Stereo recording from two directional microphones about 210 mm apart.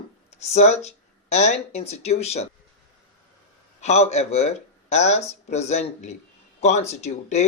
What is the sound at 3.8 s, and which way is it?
Speech, 30° left (ahead or behind).